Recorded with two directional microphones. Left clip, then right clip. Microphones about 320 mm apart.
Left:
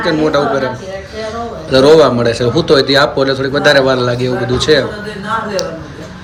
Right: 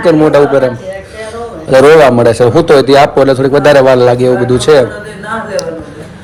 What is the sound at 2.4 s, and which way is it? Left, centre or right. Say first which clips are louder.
Speech: right 3 dB; right.